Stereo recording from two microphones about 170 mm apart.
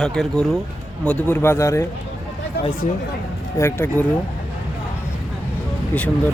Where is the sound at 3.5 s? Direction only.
15° left (ahead or behind).